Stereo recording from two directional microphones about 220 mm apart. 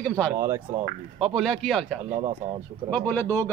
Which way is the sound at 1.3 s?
Centre (ahead or behind).